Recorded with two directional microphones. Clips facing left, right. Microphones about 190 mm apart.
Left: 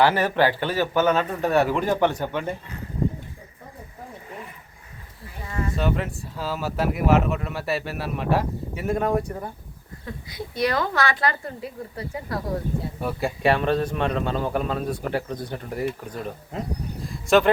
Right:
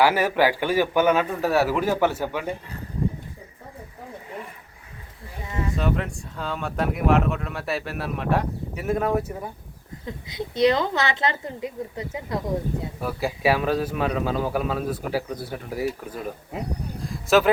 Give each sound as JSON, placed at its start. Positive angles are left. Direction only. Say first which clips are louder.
{"t": 0.0, "sound": "a man's voice", "louder": "even", "side_deg": -10}
{"t": 5.7, "sound": "speech", "louder": "even", "side_deg": 0}
{"t": 10.1, "sound": "a woman's voice", "louder": "right 2 dB", "side_deg": -20}
{"t": 13.0, "sound": "speech", "louder": "even", "side_deg": 0}
{"t": 17.0, "sound": "a sound", "louder": "left 1 dB", "side_deg": 0}